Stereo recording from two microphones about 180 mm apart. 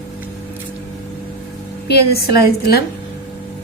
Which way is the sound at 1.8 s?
65° left (ahead or behind).